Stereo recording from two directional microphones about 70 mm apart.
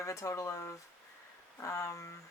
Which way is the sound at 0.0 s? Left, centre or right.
Left.